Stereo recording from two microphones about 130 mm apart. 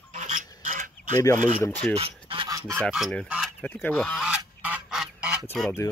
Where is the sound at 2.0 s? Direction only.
45° right (ahead or behind).